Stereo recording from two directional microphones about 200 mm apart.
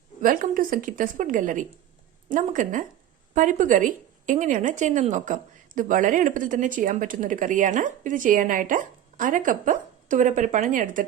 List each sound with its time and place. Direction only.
0.2 s a woman's voice: 45° right (ahead or behind)